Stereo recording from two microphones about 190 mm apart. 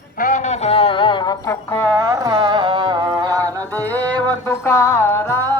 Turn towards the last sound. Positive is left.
turn(degrees=15)  # may be behind; listen again after turning